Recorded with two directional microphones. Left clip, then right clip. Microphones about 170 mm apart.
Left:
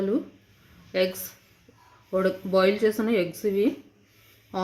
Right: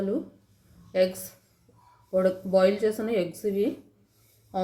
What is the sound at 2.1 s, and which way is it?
Speech, 50° left (ahead or behind).